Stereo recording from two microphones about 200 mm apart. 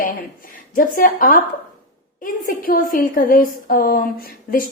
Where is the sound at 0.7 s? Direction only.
45° left (ahead or behind).